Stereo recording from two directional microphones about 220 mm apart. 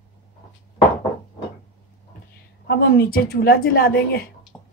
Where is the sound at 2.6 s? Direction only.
45° left (ahead or behind).